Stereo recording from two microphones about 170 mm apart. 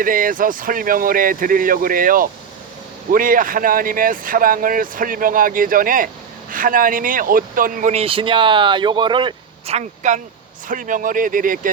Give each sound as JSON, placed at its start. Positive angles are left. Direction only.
{"t": 0.0, "sound": "speech", "side_deg": -55}